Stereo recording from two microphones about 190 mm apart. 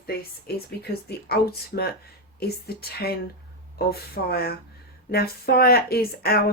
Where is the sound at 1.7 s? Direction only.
55° left (ahead or behind).